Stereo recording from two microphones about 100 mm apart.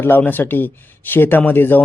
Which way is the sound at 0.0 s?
20° left (ahead or behind).